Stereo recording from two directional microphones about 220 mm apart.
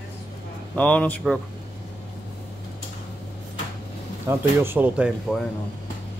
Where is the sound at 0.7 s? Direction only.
5° left (ahead or behind).